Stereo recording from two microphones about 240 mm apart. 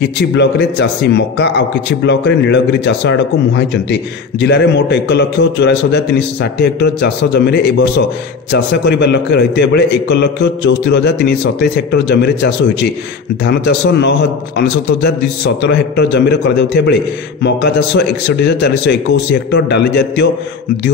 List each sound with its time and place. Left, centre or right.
0.0 s speech: left